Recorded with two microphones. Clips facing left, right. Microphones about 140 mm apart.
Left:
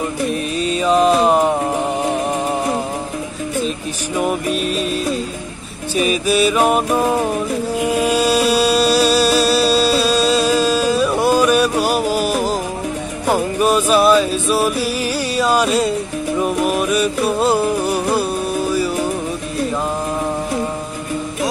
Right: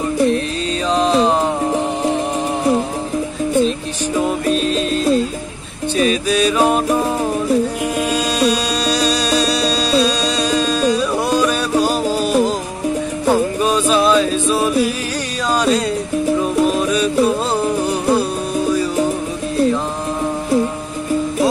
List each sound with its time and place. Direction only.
0.8 s music: 10° left (ahead or behind)
4.6 s music: 10° left (ahead or behind)
8.1 s music: 5° left (ahead or behind)